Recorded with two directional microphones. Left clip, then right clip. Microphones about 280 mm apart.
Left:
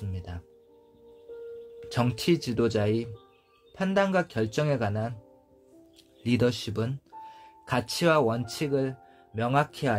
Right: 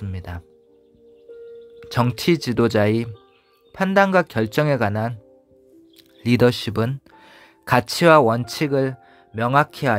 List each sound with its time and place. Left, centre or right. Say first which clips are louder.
0.0 s music: right 7 dB; right
1.8 s speech: right 7 dB; right
6.2 s speech: right 9 dB; right